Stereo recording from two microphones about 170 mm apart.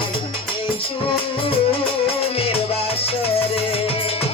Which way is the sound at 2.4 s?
35° left (ahead or behind).